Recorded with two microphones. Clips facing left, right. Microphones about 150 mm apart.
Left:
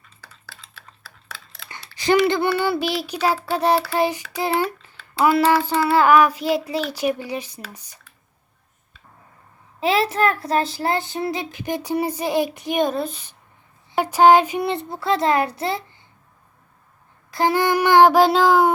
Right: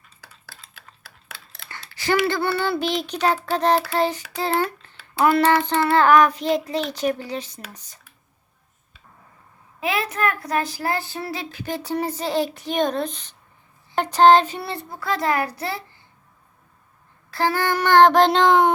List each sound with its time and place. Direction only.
1.7 s mechanisms: 20° left (ahead or behind)
2.2 s child singing: 15° left (ahead or behind)
9.8 s a child's voice: 30° left (ahead or behind)
17.3 s child singing: 15° left (ahead or behind)